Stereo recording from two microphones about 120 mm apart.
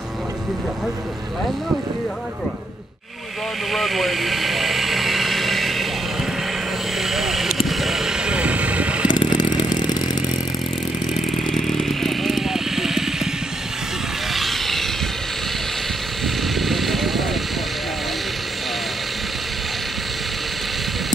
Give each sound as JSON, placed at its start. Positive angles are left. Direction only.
{"t": 3.7, "sound": "vehicle", "side_deg": 0}
{"t": 7.0, "sound": "vehicle", "side_deg": 0}
{"t": 9.1, "sound": "a sound", "side_deg": 40}
{"t": 11.1, "sound": "vehicle", "side_deg": 0}
{"t": 14.3, "sound": "vehicle", "side_deg": 0}
{"t": 16.5, "sound": "vehicle", "side_deg": 0}